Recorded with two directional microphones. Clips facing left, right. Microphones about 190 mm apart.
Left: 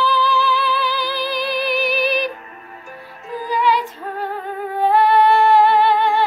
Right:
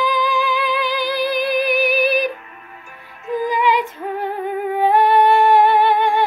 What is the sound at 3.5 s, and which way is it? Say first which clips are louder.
Music: left 2 dB; 15° right (ahead or behind).